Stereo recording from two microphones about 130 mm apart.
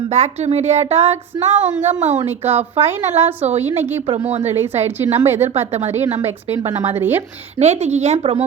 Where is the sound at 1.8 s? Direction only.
70° right (ahead or behind).